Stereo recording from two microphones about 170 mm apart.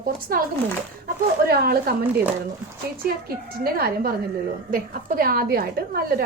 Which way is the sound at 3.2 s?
65° right (ahead or behind).